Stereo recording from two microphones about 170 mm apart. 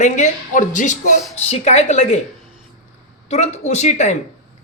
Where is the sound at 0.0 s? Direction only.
45° left (ahead or behind).